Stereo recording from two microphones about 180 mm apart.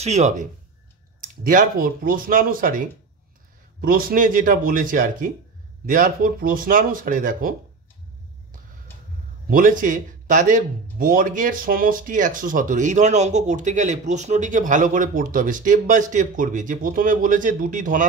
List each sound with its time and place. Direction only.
0.0 s speech: 40° right (ahead or behind)
3.8 s speech: 55° right (ahead or behind)
9.5 s speech: 50° right (ahead or behind)